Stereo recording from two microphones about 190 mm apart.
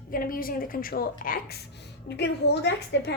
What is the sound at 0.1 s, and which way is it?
A woman's voice, 50° left (ahead or behind).